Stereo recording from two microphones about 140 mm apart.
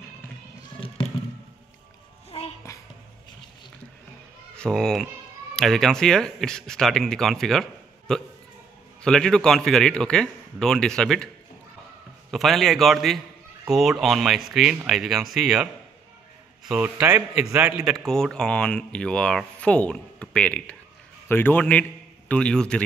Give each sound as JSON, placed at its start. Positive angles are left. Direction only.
{"t": 0.7, "sound": "a sound", "side_deg": 40}
{"t": 2.3, "sound": "music", "side_deg": 40}
{"t": 4.6, "sound": "speech", "side_deg": 5}
{"t": 12.3, "sound": "a man's voice", "side_deg": 0}
{"t": 18.0, "sound": "speech", "side_deg": 5}